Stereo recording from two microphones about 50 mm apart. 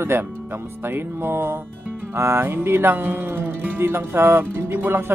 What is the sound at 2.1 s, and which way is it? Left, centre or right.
Speech, right.